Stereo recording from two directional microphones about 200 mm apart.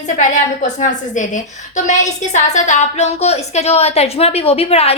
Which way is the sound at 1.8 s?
35° left (ahead or behind).